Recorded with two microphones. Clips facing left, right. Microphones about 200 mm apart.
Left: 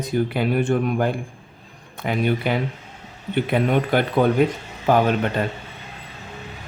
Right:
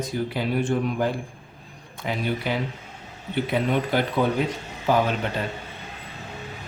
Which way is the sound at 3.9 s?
55° left (ahead or behind).